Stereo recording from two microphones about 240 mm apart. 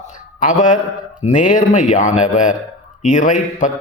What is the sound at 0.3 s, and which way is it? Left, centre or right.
A man's voice, left.